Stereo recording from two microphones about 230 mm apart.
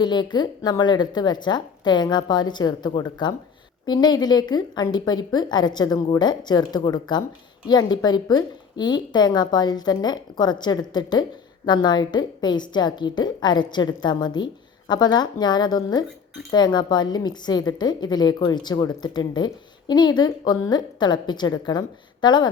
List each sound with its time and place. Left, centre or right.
0.0 s a woman's voice: centre